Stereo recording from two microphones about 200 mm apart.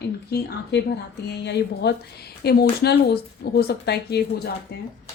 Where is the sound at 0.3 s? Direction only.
55° left (ahead or behind).